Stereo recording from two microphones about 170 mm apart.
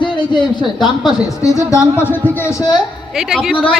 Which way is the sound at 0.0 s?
25° left (ahead or behind).